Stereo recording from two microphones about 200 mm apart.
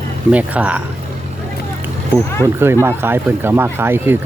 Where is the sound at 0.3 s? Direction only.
5° right (ahead or behind).